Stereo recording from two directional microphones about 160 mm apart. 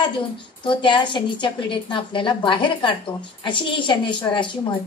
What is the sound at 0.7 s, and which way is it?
A woman's voice, 30° left (ahead or behind).